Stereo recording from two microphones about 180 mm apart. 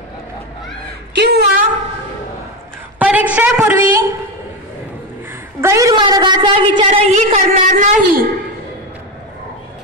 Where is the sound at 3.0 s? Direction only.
10° right (ahead or behind).